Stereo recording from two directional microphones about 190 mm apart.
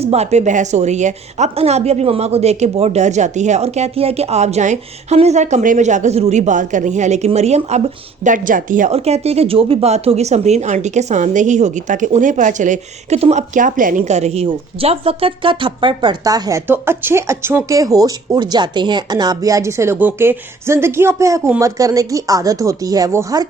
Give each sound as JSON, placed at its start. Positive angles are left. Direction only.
{"t": 0.0, "sound": "a woman's voice", "side_deg": -35}